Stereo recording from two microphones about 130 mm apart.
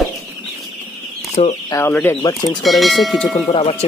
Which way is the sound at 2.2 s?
35° left (ahead or behind).